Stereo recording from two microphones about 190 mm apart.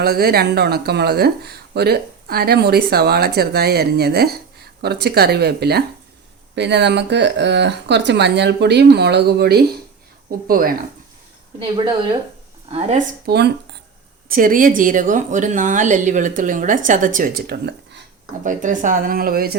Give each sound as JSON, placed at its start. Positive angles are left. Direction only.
{"t": 0.0, "sound": "speech", "side_deg": -55}
{"t": 13.2, "sound": "speech", "side_deg": -60}
{"t": 14.3, "sound": "speech", "side_deg": -45}
{"t": 18.4, "sound": "speech", "side_deg": -40}